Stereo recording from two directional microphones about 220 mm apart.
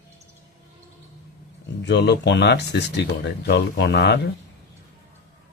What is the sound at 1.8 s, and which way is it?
Speech, 50° left (ahead or behind).